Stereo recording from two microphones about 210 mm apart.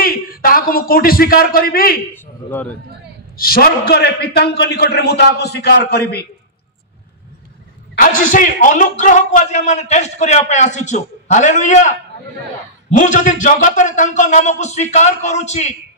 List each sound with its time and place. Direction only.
0.0 s a man's voice: 45° left (ahead or behind)
3.3 s a man's voice: 45° left (ahead or behind)
7.9 s a man's voice: 40° left (ahead or behind)
12.9 s a man's voice: 40° left (ahead or behind)